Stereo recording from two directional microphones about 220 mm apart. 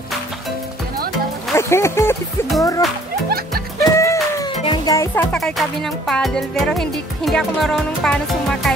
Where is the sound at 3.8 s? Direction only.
15° left (ahead or behind).